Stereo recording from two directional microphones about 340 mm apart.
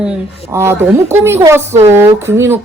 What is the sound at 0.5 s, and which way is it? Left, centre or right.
Speech, centre.